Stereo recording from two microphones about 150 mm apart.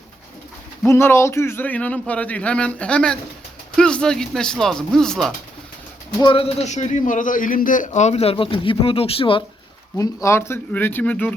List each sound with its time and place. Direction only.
0.9 s a man's voice: 15° left (ahead or behind)
6.1 s a man's voice: 35° left (ahead or behind)
10.0 s a man's voice: 20° left (ahead or behind)